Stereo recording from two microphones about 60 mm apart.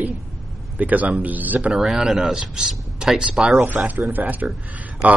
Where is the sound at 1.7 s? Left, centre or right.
Centre.